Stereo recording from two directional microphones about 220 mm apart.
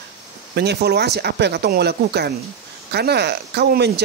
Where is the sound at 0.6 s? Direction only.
50° right (ahead or behind).